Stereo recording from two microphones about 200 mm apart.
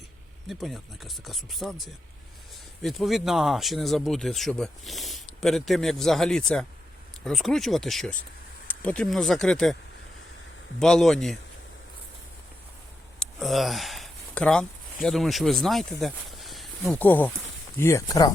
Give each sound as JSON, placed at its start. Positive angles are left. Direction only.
{"t": 0.4, "sound": "speech", "side_deg": 0}
{"t": 10.8, "sound": "speech", "side_deg": 0}
{"t": 13.1, "sound": "speech", "side_deg": 0}